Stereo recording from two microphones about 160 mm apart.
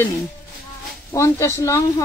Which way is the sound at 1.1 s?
20° left (ahead or behind).